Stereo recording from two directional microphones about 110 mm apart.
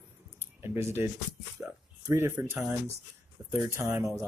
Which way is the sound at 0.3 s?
25° right (ahead or behind).